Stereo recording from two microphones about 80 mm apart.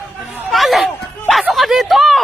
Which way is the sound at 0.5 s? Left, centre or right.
Centre.